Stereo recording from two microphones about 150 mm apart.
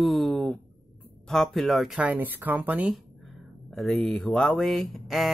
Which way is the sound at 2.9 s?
Centre (ahead or behind).